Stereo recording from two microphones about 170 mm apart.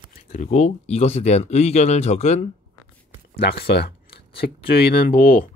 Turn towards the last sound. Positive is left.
turn(degrees=55)  # may be behind; listen again after turning